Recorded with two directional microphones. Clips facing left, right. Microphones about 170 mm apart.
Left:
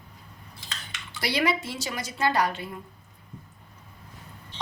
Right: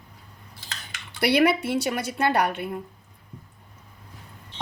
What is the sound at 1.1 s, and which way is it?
A woman's voice, 60° right (ahead or behind).